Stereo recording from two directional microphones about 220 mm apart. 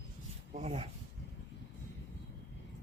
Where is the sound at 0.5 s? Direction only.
30° right (ahead or behind).